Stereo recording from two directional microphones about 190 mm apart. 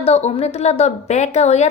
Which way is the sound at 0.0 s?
30° left (ahead or behind).